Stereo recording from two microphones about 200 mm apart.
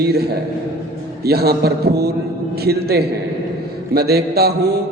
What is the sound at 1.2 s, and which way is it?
A man's voice, 50° right (ahead or behind).